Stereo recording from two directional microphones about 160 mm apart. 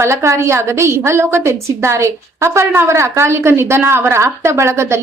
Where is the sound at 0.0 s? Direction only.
20° right (ahead or behind).